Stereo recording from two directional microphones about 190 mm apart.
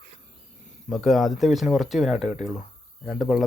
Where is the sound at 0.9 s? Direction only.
Centre (ahead or behind).